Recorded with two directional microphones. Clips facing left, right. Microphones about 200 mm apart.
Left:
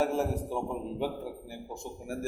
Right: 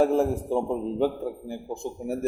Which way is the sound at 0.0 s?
45° right (ahead or behind).